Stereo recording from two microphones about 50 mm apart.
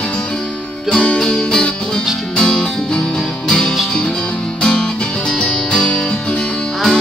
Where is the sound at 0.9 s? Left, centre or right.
Centre.